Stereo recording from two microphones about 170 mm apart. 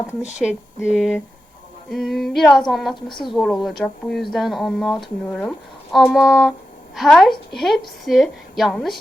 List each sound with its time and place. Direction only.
0.3 s speech: 5° right (ahead or behind)
2.9 s a woman's voice: 25° left (ahead or behind)
3.3 s speech: centre (ahead or behind)